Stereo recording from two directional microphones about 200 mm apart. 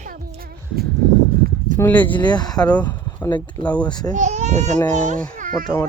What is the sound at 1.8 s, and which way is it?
Speech, 10° left (ahead or behind).